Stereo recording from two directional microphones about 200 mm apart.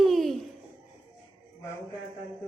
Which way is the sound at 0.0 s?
Centre (ahead or behind).